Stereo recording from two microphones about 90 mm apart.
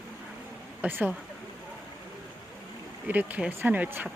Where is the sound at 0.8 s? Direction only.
20° right (ahead or behind).